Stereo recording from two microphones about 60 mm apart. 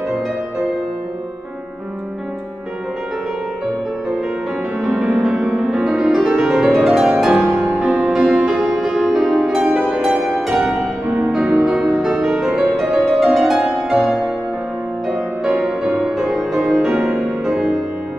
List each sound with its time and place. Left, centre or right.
4.8 s music: centre
11.1 s music: right
11.3 s music: centre
15.0 s music: centre